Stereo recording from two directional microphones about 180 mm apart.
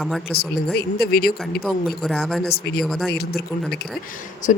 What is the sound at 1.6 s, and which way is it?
Speech, centre (ahead or behind).